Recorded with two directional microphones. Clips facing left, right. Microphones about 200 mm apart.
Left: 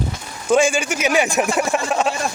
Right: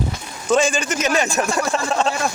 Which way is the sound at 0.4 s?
10° left (ahead or behind).